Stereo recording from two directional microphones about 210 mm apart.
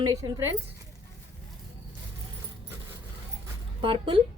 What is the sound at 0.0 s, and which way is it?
Speech, 15° right (ahead or behind).